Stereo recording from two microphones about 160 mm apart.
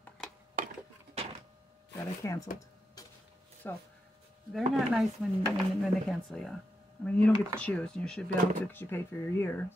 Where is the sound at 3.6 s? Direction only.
10° left (ahead or behind).